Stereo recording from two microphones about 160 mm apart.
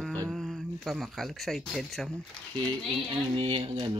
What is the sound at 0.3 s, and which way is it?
Speech, centre (ahead or behind).